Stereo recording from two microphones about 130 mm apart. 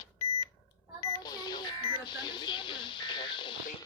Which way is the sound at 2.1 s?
35° left (ahead or behind).